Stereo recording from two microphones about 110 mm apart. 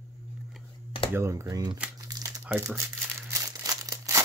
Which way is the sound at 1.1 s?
25° right (ahead or behind).